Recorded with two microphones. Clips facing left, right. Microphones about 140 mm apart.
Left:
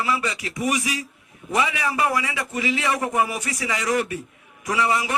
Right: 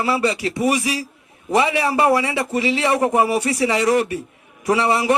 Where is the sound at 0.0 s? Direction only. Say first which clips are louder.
Right 6 dB; 30° right (ahead or behind).